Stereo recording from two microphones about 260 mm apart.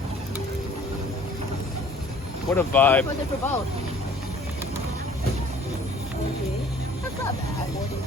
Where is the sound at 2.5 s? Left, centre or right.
Centre.